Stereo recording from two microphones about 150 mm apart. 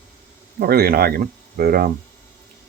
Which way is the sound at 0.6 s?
90° right.